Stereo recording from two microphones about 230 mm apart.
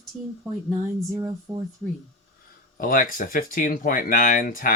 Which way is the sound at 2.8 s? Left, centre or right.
Left.